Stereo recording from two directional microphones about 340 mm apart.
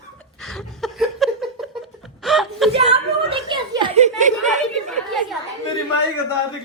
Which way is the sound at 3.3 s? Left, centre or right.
Centre.